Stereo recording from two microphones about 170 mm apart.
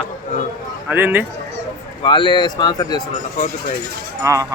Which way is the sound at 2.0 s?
30° left (ahead or behind).